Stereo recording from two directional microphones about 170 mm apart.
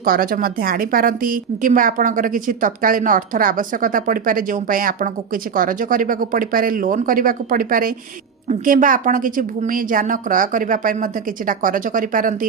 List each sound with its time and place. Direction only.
0.0 s a woman's voice: 60° right (ahead or behind)